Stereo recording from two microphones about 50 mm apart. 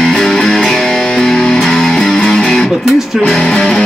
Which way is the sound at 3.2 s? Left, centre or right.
Centre.